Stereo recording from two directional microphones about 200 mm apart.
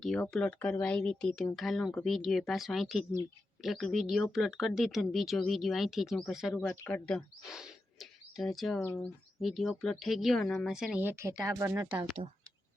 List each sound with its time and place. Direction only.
0.0 s speech: 5° left (ahead or behind)
7.1 s speech: centre (ahead or behind)
8.8 s speech: 10° left (ahead or behind)
9.4 s speech: centre (ahead or behind)